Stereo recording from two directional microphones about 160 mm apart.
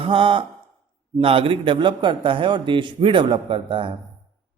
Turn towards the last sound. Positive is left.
turn(degrees=-30)  # may be behind; listen again after turning